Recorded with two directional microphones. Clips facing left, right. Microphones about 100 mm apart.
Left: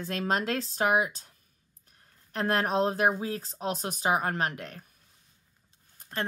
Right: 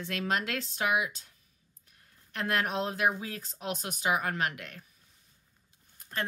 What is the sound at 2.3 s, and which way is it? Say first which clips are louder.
Speech: left 4 dB; 35° left (ahead or behind).